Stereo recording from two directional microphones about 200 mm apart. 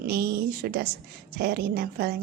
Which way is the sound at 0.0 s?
50° right (ahead or behind).